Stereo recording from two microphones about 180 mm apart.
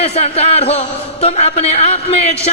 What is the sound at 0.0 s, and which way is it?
Speech, 35° left (ahead or behind).